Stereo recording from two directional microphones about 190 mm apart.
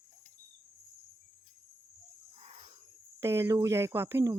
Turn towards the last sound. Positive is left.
turn(degrees=-15)  # may be behind; listen again after turning